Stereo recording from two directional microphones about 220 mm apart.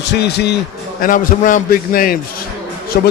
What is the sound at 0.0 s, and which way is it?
Speech, 50° left (ahead or behind).